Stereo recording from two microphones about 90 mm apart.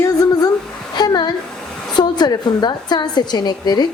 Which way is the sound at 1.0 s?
50° left (ahead or behind).